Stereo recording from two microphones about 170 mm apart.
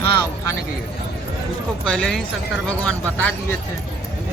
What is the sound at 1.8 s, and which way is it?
Speech, 5° left (ahead or behind).